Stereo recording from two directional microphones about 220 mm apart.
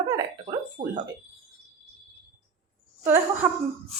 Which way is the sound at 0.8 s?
35° right (ahead or behind).